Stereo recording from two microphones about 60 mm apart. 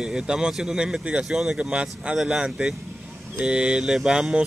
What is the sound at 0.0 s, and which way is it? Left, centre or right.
Speech, centre.